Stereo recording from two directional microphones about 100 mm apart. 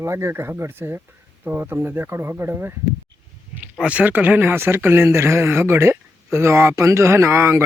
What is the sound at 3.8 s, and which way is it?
Speech, 15° right (ahead or behind).